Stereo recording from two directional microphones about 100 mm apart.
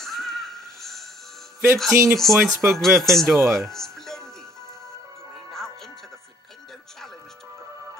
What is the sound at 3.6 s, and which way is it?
Music, 5° left (ahead or behind).